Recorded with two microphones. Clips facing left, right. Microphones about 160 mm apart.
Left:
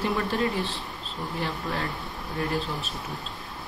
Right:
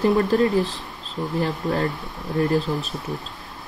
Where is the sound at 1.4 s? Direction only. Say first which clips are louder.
Right 7 dB; 40° right (ahead or behind).